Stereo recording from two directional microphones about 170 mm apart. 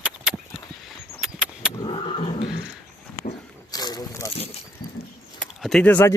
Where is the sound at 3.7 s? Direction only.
25° left (ahead or behind).